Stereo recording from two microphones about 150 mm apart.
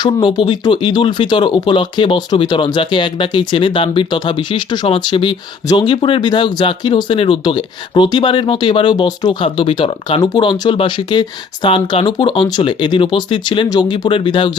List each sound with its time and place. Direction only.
0.0 s speech: 30° left (ahead or behind)